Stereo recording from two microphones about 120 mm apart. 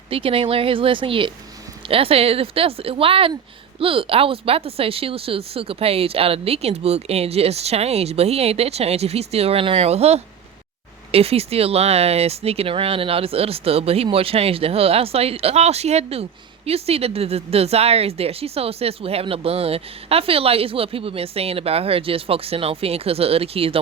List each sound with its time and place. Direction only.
0.1 s speech: 50° right (ahead or behind)